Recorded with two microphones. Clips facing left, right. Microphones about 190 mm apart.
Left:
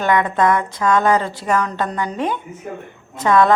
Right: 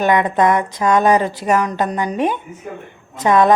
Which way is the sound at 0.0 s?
20° right (ahead or behind).